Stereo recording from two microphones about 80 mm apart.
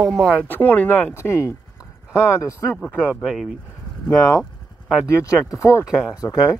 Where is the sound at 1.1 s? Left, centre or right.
Left.